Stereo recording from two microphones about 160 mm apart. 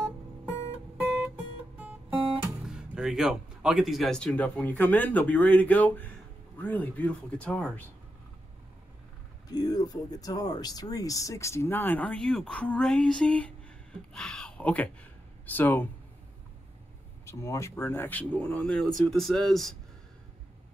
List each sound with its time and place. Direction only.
1.0 s music: 5° right (ahead or behind)
2.3 s speech: 5° right (ahead or behind)
9.5 s speech: 25° left (ahead or behind)
17.3 s speech: 15° left (ahead or behind)